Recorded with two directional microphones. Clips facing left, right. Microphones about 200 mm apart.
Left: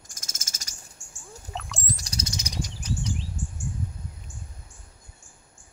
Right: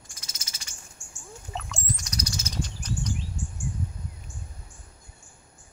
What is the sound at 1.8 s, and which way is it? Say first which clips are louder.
Bird: right 1 dB; 35° left (ahead or behind).